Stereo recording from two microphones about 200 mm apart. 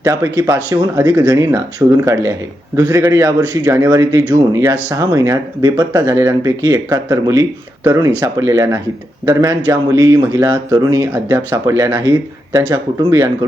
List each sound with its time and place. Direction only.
0.0 s a man's voice: 15° right (ahead or behind)